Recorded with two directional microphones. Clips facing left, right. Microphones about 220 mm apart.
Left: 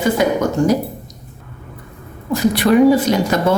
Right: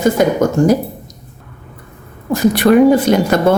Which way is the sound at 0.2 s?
45° right (ahead or behind).